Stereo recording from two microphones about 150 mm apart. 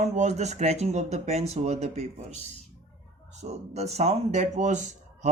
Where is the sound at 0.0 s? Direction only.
50° right (ahead or behind).